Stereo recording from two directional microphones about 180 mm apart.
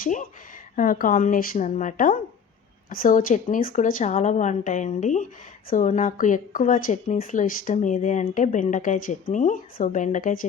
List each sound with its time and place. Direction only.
0.0 s speech: 45° left (ahead or behind)